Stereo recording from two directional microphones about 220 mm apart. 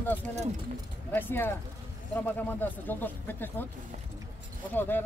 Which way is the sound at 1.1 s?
10° left (ahead or behind).